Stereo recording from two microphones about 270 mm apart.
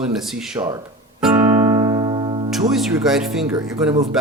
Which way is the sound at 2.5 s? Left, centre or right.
Centre.